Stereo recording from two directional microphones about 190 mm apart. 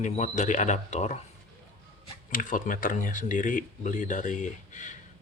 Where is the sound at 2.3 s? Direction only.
45° left (ahead or behind).